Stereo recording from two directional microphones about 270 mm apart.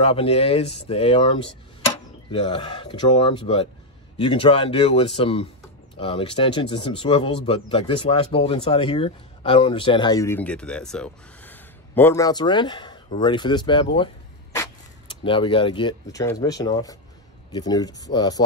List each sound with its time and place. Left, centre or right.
0.0 s speech: left